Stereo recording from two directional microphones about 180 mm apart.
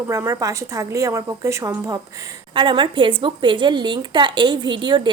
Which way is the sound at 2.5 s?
25° right (ahead or behind).